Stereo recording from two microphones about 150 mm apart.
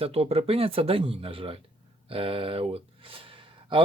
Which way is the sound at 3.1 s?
35° right (ahead or behind).